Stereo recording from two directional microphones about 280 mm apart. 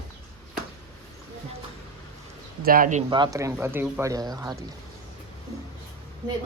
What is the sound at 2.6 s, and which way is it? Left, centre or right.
Speech, right.